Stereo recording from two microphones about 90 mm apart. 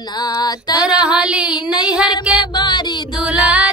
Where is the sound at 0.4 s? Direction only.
50° left (ahead or behind).